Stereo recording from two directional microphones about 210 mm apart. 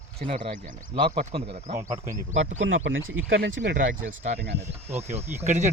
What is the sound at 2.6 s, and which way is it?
Speech, 65° right (ahead or behind).